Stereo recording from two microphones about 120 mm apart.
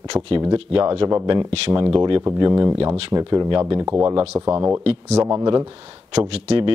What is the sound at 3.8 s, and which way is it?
Speech, 20° right (ahead or behind).